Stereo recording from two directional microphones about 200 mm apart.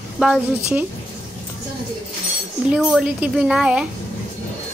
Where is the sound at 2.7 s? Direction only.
5° right (ahead or behind).